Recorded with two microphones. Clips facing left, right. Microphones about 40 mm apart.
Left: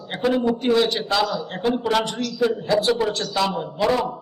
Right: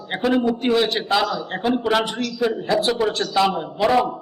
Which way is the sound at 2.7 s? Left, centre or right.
Centre.